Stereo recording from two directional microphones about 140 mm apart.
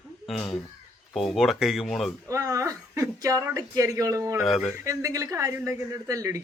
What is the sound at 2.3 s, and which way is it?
Speech, 25° right (ahead or behind).